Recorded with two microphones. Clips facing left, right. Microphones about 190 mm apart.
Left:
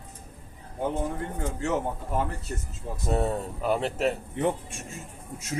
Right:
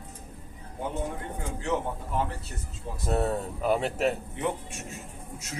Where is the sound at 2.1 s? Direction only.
45° left (ahead or behind).